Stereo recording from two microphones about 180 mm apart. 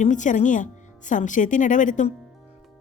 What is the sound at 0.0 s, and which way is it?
Speech, 45° left (ahead or behind).